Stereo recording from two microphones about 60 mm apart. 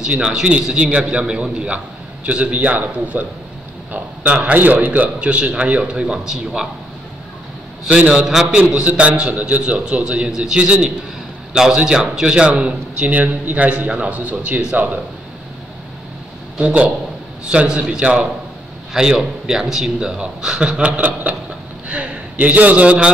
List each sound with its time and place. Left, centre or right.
0.0 s a man's voice: centre
8.1 s a man's voice: centre
16.5 s a man's voice: centre